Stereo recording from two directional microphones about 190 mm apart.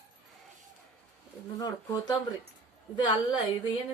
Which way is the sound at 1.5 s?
20° left (ahead or behind).